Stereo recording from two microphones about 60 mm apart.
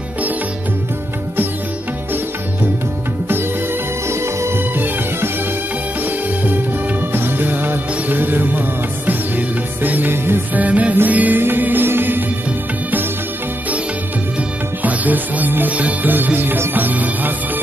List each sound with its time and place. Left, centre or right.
4.1 s music: right
4.7 s music: right
10.5 s music: right
14.8 s music: right